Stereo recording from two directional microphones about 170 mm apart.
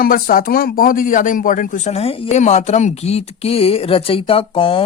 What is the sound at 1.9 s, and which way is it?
Speech, 35° left (ahead or behind).